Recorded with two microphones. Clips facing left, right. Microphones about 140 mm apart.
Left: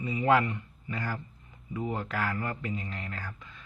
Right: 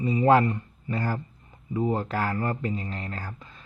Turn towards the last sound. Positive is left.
turn(degrees=-35)  # may be behind; listen again after turning